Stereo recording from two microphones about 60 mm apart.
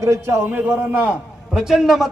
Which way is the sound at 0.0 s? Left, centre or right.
Right.